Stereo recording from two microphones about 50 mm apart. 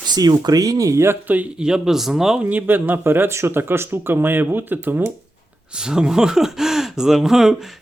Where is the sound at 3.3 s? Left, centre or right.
Right.